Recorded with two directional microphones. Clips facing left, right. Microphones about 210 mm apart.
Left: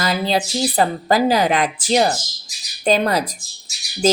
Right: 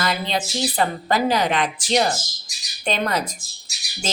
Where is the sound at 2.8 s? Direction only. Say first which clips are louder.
Left 6 dB; 35° left (ahead or behind).